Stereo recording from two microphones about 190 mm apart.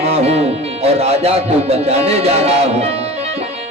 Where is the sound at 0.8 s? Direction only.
35° right (ahead or behind).